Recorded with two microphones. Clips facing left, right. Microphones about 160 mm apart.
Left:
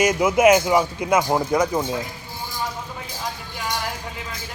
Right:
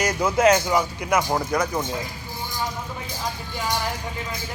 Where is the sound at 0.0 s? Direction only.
20° left (ahead or behind).